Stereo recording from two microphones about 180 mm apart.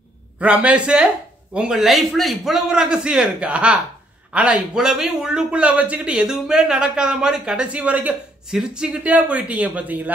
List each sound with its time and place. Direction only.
0.4 s a man's voice: 5° right (ahead or behind)